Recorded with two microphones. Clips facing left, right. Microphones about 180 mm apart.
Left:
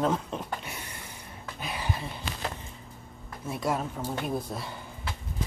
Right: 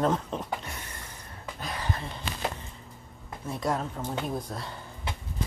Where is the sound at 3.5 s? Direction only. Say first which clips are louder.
Even; 5° left (ahead or behind).